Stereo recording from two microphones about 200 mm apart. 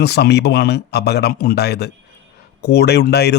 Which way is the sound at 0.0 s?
55° left (ahead or behind).